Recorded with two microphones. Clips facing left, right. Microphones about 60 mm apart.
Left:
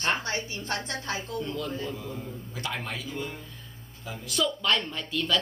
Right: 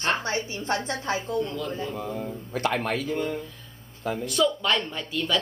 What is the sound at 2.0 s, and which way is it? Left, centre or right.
Speech, right.